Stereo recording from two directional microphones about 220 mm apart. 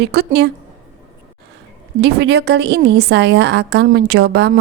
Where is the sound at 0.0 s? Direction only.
45° right (ahead or behind).